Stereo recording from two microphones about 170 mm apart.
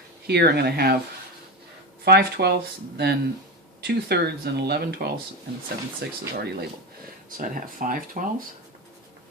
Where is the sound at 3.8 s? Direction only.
70° right (ahead or behind).